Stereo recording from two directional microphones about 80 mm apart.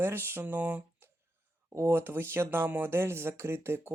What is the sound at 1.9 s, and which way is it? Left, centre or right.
Speech, right.